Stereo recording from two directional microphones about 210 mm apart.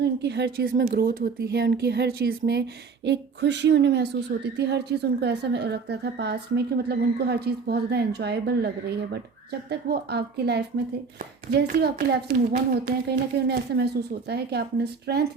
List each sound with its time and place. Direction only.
0.0 s a woman's voice: 55° right (ahead or behind)